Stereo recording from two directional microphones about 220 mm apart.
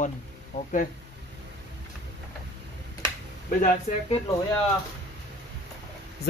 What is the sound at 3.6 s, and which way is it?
Speech, 35° left (ahead or behind).